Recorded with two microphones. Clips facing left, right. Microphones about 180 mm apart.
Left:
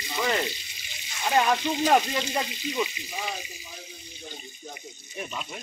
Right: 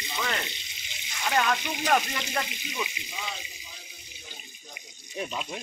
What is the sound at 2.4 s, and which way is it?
Speech, 15° right (ahead or behind).